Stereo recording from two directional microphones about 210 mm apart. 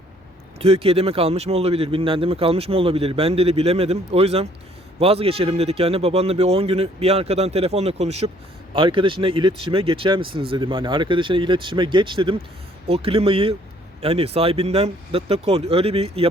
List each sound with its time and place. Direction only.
0.6 s speech: 30° right (ahead or behind)